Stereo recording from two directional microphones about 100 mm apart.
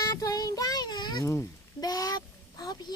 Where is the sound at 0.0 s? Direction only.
35° left (ahead or behind).